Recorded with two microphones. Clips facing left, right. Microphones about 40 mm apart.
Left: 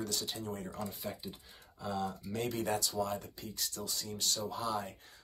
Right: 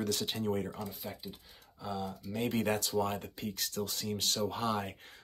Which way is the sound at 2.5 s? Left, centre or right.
Right.